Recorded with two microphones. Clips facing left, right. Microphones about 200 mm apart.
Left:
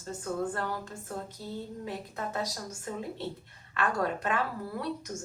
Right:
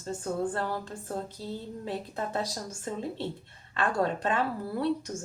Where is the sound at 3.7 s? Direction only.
30° right (ahead or behind).